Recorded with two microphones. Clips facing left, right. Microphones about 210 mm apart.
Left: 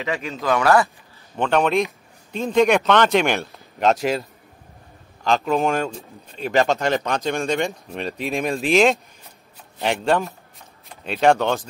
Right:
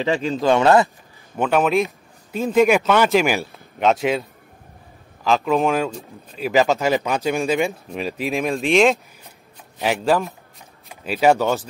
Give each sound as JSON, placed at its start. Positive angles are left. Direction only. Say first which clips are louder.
{"t": 0.0, "sound": "speech", "louder": "right 6 dB", "side_deg": -30}
{"t": 1.3, "sound": "speech", "louder": "right 1 dB", "side_deg": -5}